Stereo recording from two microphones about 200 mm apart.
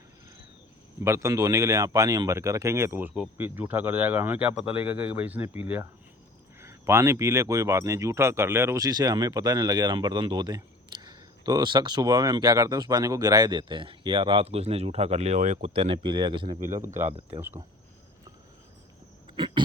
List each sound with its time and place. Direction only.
1.0 s speech: 15° right (ahead or behind)
16.6 s speech: 40° right (ahead or behind)